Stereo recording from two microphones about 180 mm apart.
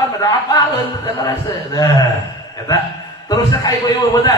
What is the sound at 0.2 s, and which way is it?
A man's voice, 20° left (ahead or behind).